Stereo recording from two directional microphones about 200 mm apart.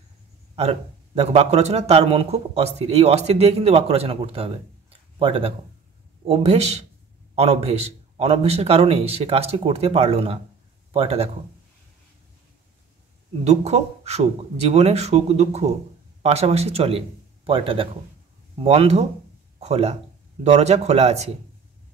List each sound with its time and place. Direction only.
0.6 s a man's voice: 30° right (ahead or behind)
13.4 s a man's voice: 30° right (ahead or behind)